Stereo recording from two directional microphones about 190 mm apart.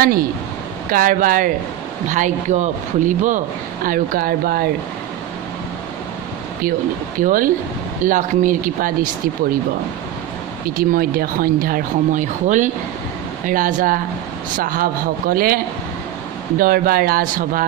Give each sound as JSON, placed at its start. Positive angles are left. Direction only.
{"t": 0.0, "sound": "a man's voice", "side_deg": -50}
{"t": 7.2, "sound": "a man's voice", "side_deg": -45}
{"t": 10.8, "sound": "a man's voice", "side_deg": -50}